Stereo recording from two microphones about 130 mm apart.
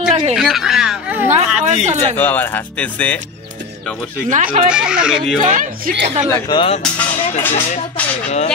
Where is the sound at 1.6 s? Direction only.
60° right (ahead or behind).